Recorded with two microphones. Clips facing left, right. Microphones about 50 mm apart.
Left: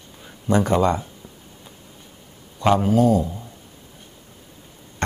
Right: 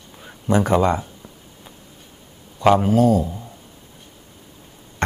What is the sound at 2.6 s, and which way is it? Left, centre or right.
Speech, centre.